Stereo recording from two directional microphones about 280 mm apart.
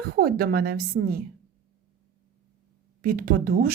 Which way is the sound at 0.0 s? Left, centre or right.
Right.